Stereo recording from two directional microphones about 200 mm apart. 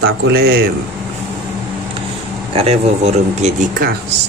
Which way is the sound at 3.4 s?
50° right (ahead or behind).